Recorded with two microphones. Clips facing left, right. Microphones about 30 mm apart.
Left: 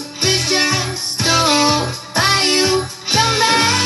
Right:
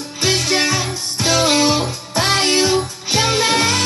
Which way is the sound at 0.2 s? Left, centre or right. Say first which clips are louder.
Left 1 dB; centre.